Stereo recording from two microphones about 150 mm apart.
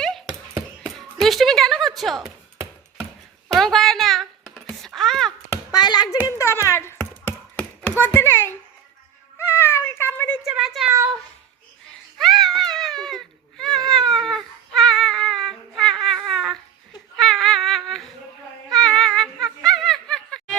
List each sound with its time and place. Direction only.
0.0 s a sound: centre (ahead or behind)
2.0 s speech: centre (ahead or behind)
3.5 s a sound: centre (ahead or behind)
5.5 s hands: 25° left (ahead or behind)
6.1 s speech: 20° left (ahead or behind)
7.3 s tap: 10° left (ahead or behind)
7.9 s a child's voice: 15° left (ahead or behind)
9.4 s cat: 15° left (ahead or behind)
10.4 s a woman's voice: 5° right (ahead or behind)
12.1 s baby cry: centre (ahead or behind)
17.2 s cat: centre (ahead or behind)
18.7 s a sound: 5° left (ahead or behind)